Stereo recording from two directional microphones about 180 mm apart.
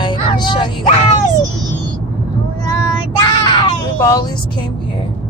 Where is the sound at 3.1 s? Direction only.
20° left (ahead or behind).